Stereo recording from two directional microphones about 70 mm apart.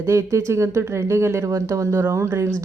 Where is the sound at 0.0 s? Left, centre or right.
Right.